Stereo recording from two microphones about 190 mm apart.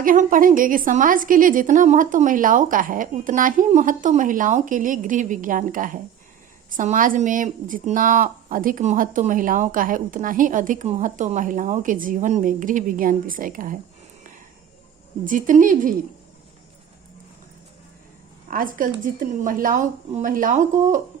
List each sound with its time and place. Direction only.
0.0 s speech: 45° right (ahead or behind)
15.3 s speech: 45° right (ahead or behind)
18.4 s speech: 45° right (ahead or behind)